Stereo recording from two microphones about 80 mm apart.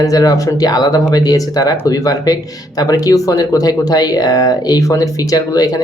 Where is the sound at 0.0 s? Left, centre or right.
Left.